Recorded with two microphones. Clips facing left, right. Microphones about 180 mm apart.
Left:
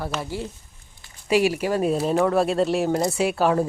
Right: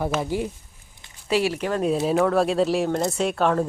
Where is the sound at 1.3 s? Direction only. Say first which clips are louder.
Left 2 dB; 15° left (ahead or behind).